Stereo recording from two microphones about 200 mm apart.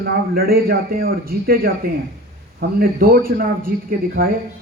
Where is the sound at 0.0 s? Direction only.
50° right (ahead or behind).